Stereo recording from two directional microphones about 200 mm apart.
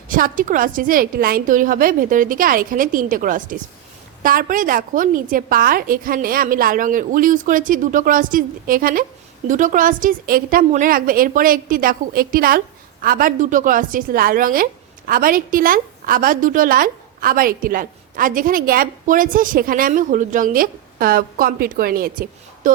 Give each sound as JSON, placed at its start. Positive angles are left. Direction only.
{"t": 0.1, "sound": "a woman's voice", "side_deg": -45}